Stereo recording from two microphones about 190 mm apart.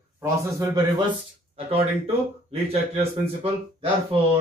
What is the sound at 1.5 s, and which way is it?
Speech, 30° right (ahead or behind).